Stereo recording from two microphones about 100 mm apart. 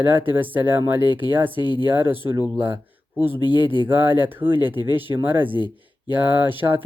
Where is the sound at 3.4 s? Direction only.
50° left (ahead or behind).